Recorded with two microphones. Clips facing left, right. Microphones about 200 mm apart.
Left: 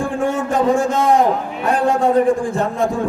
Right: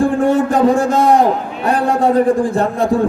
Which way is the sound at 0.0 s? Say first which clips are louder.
Right 6 dB; 35° right (ahead or behind).